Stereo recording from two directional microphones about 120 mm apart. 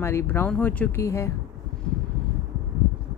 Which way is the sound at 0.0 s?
20° left (ahead or behind).